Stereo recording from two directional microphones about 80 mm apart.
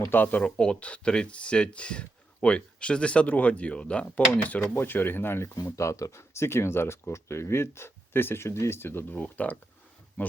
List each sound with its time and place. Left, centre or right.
0.1 s speech: left
5.7 s speech: left